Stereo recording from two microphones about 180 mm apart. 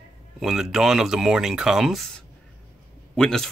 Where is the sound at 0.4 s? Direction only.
Centre (ahead or behind).